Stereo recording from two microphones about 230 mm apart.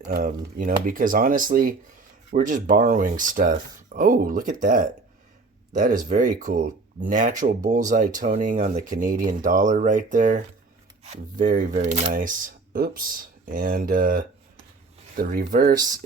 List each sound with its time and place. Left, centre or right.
0.1 s speech: right